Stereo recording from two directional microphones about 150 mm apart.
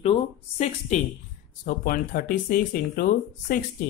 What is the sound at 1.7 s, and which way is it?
Speech, 75° left (ahead or behind).